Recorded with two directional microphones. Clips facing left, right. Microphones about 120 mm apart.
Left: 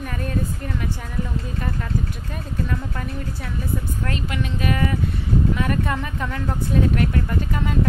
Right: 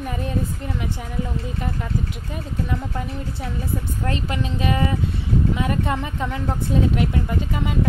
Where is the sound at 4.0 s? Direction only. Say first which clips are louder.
Right 1 dB; 30° right (ahead or behind).